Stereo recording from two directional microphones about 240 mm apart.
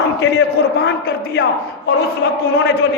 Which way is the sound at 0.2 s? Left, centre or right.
Left.